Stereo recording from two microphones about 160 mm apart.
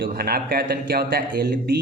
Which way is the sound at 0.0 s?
70° right (ahead or behind).